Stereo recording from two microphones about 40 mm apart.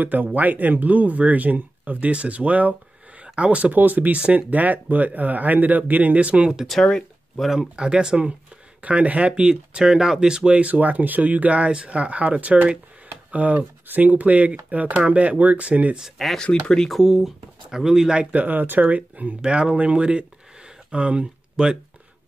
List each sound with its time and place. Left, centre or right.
0.0 s speech: right
3.7 s speech: right
7.5 s speech: right
8.8 s speech: right
9.3 s speech: right
10.5 s speech: right
16.2 s speech: centre
16.6 s speech: centre
16.9 s speech: centre
18.3 s speech: right
19.4 s speech: right
19.8 s a sound: right